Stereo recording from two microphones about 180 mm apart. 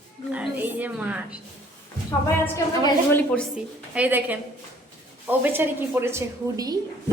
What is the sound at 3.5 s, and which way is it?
A woman's voice, 10° right (ahead or behind).